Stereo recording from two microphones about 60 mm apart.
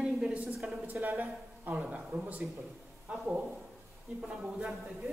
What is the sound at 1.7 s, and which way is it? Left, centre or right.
A man's voice, centre.